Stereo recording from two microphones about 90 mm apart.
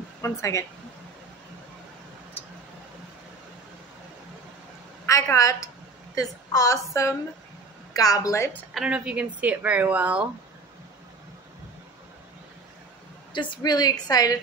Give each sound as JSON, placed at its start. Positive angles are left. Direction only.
{"t": 0.2, "sound": "a woman's voice", "side_deg": 35}
{"t": 5.0, "sound": "a woman's voice", "side_deg": 35}
{"t": 8.7, "sound": "speech", "side_deg": -10}
{"t": 13.3, "sound": "a woman's voice", "side_deg": 60}
{"t": 13.6, "sound": "a woman's voice", "side_deg": 50}